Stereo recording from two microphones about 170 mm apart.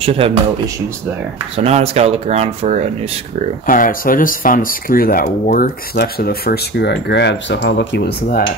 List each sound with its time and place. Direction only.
0.0 s speech: 35° right (ahead or behind)
1.6 s speech: 35° right (ahead or behind)
3.6 s speech: 55° left (ahead or behind)